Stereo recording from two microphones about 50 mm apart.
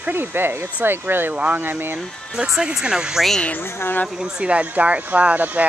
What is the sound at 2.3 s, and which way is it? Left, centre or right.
Speech, centre.